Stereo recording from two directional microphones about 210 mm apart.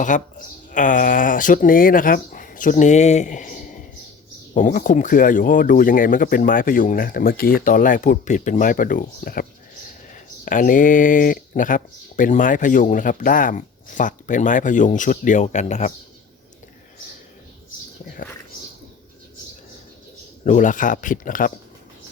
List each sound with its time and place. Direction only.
0.0 s speech: 40° left (ahead or behind)
20.4 s speech: 35° left (ahead or behind)